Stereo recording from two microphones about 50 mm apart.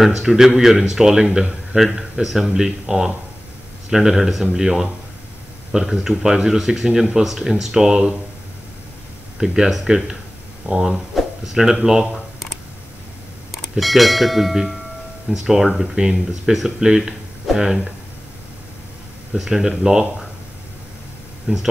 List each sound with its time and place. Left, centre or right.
0.0 s speech: centre
9.4 s speech: centre
13.5 s speech: centre
19.3 s speech: centre
21.5 s speech: centre